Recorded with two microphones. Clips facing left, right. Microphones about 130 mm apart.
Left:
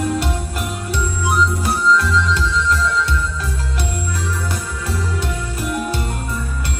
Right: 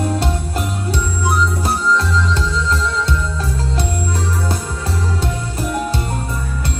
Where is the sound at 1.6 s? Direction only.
35° right (ahead or behind).